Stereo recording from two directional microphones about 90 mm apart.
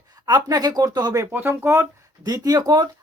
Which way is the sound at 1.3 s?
25° right (ahead or behind).